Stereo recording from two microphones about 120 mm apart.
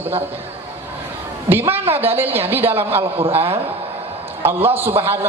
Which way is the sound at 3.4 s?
50° right (ahead or behind).